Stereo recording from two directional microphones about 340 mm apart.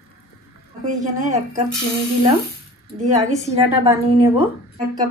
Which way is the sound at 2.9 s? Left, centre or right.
Centre.